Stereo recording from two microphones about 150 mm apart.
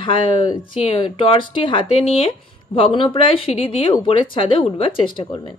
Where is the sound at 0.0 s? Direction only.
35° left (ahead or behind).